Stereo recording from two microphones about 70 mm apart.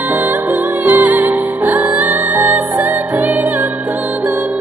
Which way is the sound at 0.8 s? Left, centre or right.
Right.